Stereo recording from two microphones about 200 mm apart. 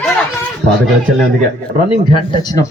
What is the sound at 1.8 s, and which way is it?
Speech, 20° left (ahead or behind).